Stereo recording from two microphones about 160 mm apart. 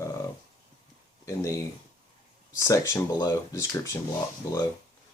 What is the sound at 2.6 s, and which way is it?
Speech, 20° left (ahead or behind).